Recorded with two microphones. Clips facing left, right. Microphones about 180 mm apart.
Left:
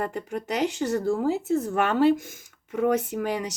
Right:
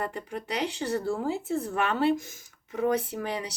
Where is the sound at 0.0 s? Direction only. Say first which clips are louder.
Left 4 dB; 40° left (ahead or behind).